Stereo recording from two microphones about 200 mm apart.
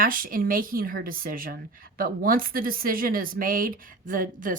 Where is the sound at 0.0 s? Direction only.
45° right (ahead or behind).